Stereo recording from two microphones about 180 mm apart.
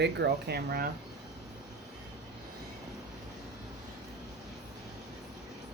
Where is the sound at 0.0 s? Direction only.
65° right (ahead or behind).